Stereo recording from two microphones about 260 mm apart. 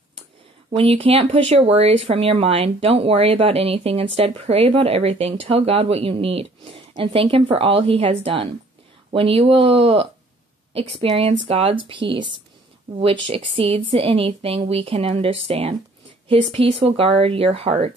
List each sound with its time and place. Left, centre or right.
0.7 s speech: right